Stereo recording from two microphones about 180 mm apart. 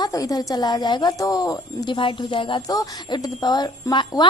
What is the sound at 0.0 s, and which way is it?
A woman's voice, 20° left (ahead or behind).